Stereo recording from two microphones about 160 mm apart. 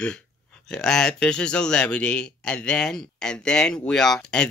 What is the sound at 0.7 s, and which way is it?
Speech, 5° left (ahead or behind).